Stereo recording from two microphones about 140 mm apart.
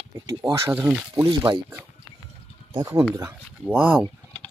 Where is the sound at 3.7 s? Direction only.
10° right (ahead or behind).